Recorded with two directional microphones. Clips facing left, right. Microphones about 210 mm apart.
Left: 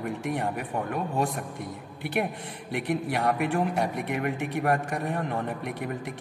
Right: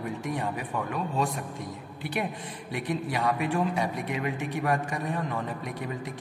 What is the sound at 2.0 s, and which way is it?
Speech, 55° left (ahead or behind).